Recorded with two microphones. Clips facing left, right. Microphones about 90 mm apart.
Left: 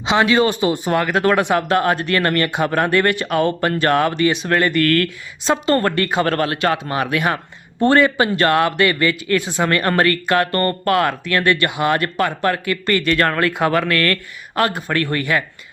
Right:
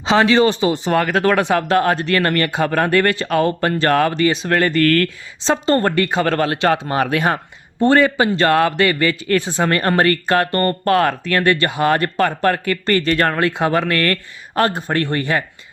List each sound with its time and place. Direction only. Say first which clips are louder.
0.0 s a man's voice: right 2 dB; 35° right (ahead or behind)